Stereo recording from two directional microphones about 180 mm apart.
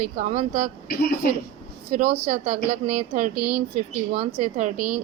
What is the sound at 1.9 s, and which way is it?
Speech, 40° right (ahead or behind).